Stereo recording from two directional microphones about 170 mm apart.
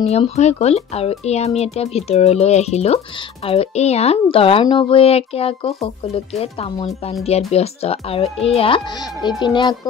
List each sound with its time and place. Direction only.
0.0 s speech: 40° left (ahead or behind)